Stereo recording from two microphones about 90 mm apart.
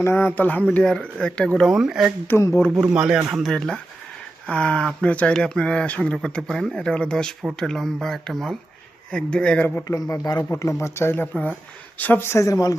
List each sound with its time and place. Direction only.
0.0 s speech: 25° left (ahead or behind)
0.7 s speech: 10° left (ahead or behind)
1.6 s speech: 5° right (ahead or behind)
2.2 s speech: 30° left (ahead or behind)
2.9 s speech: 10° right (ahead or behind)
4.4 s speech: 10° left (ahead or behind)
9.8 s speech: 40° left (ahead or behind)
10.8 s speech: 30° left (ahead or behind)